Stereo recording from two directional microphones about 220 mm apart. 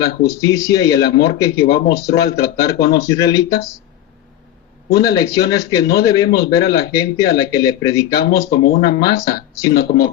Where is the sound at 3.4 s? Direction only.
45° left (ahead or behind).